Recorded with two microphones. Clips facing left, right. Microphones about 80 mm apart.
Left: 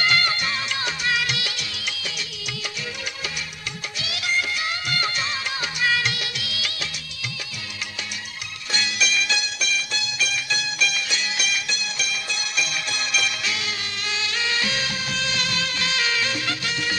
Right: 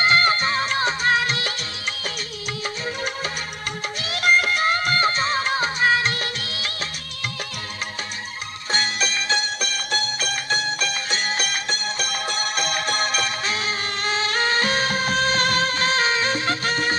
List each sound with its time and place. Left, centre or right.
0.0 s music: right
4.0 s music: right
8.7 s music: right